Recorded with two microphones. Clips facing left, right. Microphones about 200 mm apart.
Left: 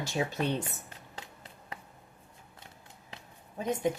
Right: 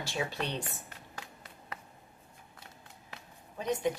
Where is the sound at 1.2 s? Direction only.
25° left (ahead or behind).